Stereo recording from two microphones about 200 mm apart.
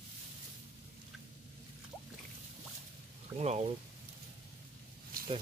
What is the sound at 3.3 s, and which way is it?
Speech, 35° right (ahead or behind).